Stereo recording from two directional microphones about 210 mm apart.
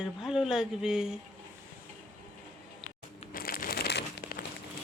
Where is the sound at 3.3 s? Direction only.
45° left (ahead or behind).